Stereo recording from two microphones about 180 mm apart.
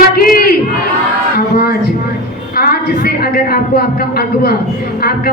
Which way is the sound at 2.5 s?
55° left (ahead or behind).